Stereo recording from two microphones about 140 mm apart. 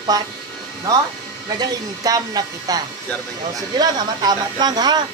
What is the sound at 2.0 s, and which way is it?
Speech, 25° right (ahead or behind).